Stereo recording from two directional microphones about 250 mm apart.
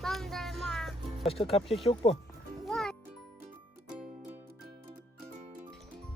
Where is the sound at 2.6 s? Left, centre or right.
Centre.